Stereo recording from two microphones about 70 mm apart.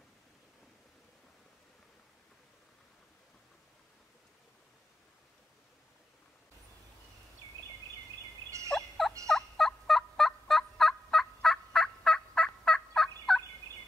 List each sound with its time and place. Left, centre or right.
8.5 s fowl: right
8.7 s fowl: centre